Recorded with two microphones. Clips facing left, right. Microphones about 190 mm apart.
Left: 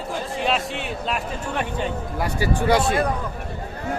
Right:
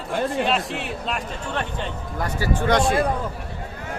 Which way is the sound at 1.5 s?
10° left (ahead or behind).